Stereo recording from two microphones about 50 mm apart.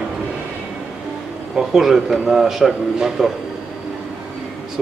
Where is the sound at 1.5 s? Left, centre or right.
Centre.